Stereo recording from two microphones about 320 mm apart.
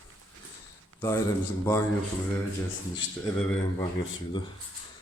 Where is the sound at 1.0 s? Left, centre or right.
Centre.